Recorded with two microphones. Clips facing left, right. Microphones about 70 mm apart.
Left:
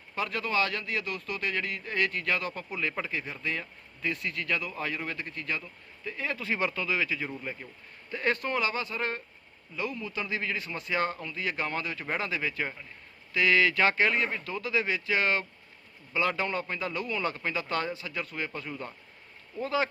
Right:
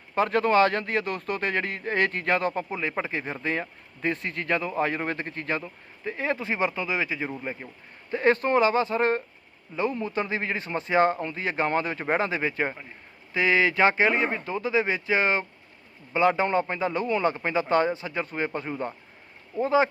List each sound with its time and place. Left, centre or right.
0.1 s a man's voice: right